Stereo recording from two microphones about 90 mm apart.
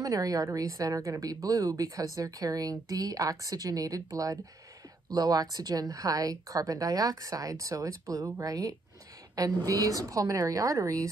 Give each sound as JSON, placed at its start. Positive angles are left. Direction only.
{"t": 0.0, "sound": "a woman's voice", "side_deg": -40}